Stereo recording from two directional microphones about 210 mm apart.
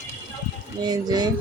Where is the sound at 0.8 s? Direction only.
20° right (ahead or behind).